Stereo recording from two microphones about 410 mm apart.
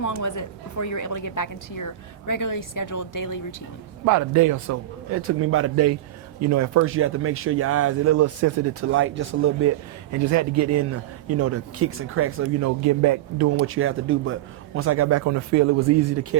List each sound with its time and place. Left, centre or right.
0.0 s a woman's voice: left
4.0 s speech: right